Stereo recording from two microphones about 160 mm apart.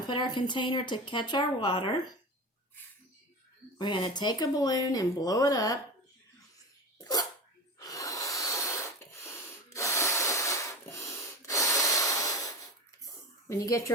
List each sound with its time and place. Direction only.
0.1 s speech: 30° left (ahead or behind)
3.8 s speech: 30° left (ahead or behind)
7.0 s dog: 25° left (ahead or behind)
7.8 s snort: 20° left (ahead or behind)
9.2 s a sound: 15° left (ahead or behind)
13.5 s speech: 20° left (ahead or behind)